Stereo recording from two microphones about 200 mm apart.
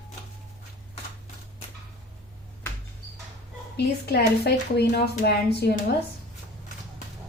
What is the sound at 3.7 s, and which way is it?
Speech, 55° left (ahead or behind).